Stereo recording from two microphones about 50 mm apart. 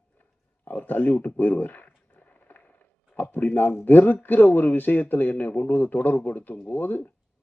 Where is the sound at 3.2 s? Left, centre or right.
Left.